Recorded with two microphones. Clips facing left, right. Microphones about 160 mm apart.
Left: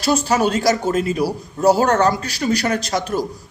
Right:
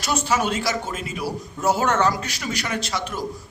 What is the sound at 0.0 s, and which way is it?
A man's voice, 35° left (ahead or behind).